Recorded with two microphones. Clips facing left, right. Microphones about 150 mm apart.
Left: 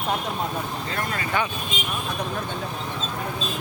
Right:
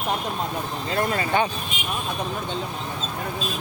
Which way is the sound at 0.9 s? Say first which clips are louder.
Right 5 dB; 25° right (ahead or behind).